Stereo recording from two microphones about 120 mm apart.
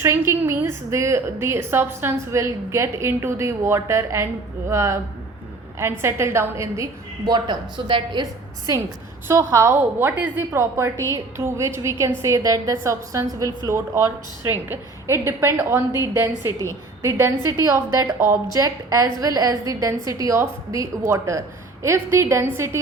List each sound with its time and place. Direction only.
0.0 s a woman's voice: 20° right (ahead or behind)
7.3 s a woman's voice: 40° right (ahead or behind); by 22.8 s 20° right (ahead or behind)